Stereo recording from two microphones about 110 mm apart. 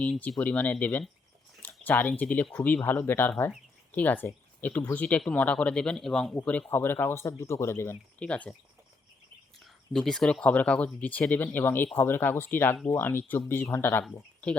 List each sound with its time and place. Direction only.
0.0 s speech: 10° left (ahead or behind)
8.2 s speech: 10° left (ahead or behind)
9.6 s speech: centre (ahead or behind); by 14.0 s 20° left (ahead or behind)